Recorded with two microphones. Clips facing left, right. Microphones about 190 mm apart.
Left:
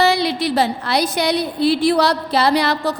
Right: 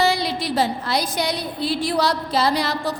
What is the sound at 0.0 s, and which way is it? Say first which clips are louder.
A woman's voice: left 4 dB; 65° left (ahead or behind).